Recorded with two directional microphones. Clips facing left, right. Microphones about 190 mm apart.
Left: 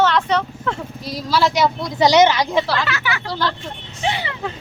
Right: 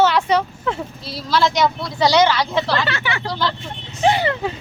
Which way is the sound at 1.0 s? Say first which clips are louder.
Even; 10° left (ahead or behind).